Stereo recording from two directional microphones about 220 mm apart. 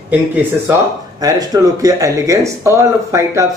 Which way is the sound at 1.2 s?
15° right (ahead or behind).